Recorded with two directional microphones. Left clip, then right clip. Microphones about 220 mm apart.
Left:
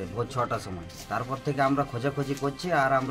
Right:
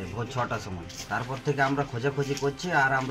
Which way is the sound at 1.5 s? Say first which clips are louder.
Left 1 dB; 20° left (ahead or behind).